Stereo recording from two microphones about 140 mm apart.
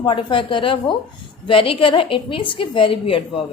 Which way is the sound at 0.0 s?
35° left (ahead or behind).